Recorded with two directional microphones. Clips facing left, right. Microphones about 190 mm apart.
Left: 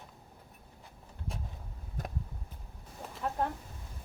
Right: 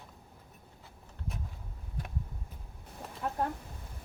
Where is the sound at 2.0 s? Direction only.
45° left (ahead or behind).